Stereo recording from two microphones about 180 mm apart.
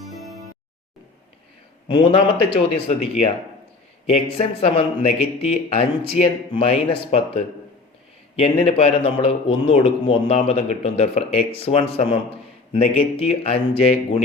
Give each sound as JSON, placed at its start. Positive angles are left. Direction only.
{"t": 1.9, "sound": "speech", "side_deg": 25}